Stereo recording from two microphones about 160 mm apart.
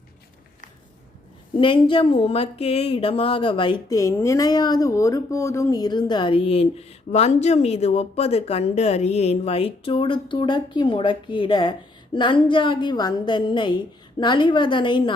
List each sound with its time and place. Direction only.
1.5 s a woman's voice: 30° left (ahead or behind)